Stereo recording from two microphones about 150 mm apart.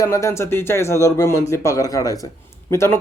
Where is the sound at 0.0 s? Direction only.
20° left (ahead or behind).